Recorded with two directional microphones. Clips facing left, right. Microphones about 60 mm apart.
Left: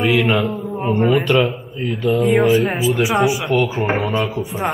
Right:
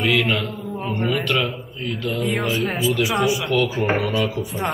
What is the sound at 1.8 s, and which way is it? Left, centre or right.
Speech, centre.